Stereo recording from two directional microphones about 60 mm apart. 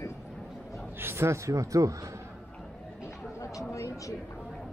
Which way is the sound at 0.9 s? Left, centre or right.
Right.